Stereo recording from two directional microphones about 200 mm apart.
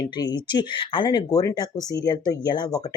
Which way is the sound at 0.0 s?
20° left (ahead or behind).